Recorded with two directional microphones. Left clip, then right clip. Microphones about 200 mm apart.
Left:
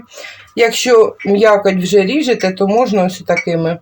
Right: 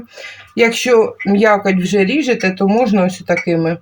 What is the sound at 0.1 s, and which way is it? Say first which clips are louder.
Speech: left 2 dB; 30° left (ahead or behind).